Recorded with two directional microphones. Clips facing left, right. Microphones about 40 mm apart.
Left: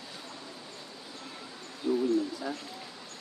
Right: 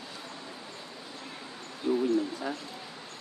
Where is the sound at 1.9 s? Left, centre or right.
Right.